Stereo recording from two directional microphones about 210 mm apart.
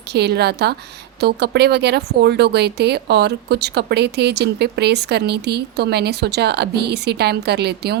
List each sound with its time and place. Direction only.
0.1 s speech: 50° right (ahead or behind)